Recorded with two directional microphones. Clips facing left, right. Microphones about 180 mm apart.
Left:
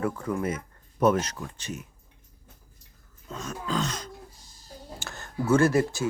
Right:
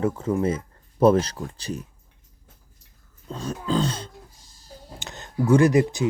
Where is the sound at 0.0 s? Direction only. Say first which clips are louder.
Right 5 dB; 25° right (ahead or behind).